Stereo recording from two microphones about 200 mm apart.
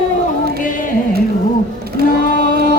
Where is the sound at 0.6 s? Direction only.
40° left (ahead or behind).